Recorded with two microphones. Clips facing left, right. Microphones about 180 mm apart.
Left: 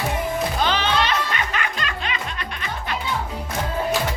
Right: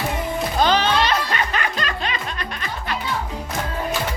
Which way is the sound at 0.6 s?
40° right (ahead or behind).